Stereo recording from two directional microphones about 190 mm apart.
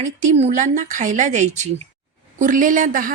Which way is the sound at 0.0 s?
40° right (ahead or behind).